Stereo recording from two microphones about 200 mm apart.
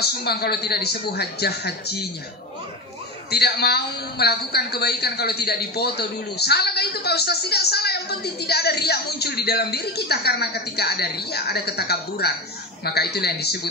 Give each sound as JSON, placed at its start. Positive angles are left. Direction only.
{"t": 0.0, "sound": "a man's voice", "side_deg": 55}
{"t": 3.3, "sound": "a man's voice", "side_deg": 55}